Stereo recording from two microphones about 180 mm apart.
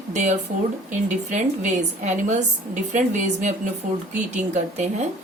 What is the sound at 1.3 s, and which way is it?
A woman's voice, 40° right (ahead or behind).